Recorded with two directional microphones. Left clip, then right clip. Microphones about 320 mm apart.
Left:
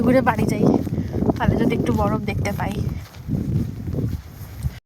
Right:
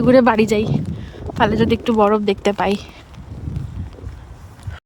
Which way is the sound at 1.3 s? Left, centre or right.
Centre.